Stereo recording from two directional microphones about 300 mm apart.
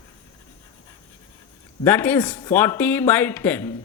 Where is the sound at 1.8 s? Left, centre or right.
Centre.